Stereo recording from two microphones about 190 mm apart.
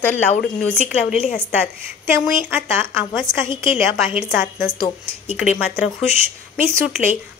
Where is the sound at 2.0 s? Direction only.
10° right (ahead or behind).